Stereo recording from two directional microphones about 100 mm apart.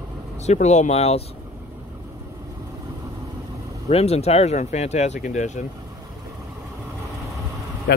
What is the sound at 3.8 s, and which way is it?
Speech, 90° left.